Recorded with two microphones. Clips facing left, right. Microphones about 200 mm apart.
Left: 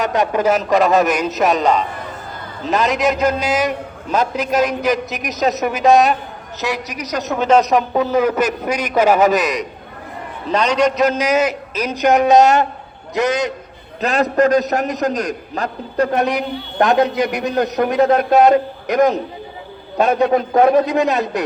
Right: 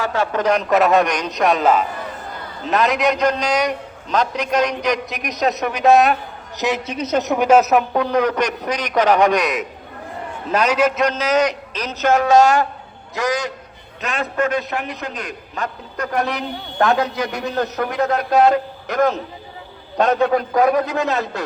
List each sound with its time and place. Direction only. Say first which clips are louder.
0.0 s a man's voice: left 3 dB; 15° left (ahead or behind)
0.4 s a man's voice: right 1 dB; 5° left (ahead or behind)
6.6 s a man's voice: right 2 dB; 20° right (ahead or behind); by 11.1 s 5° right (ahead or behind)
11.1 s a man's voice: left 1 dB; 10° left (ahead or behind)
14.0 s a man's voice: left 7 dB; 40° left (ahead or behind)
16.1 s a man's voice: left 4 dB; 20° left (ahead or behind)